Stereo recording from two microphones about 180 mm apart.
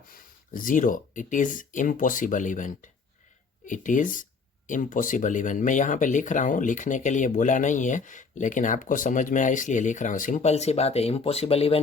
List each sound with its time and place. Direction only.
0.1 s speech: 50° left (ahead or behind); by 11.8 s 35° left (ahead or behind)